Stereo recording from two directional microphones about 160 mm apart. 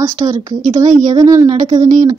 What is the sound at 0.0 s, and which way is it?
Speech, 20° right (ahead or behind).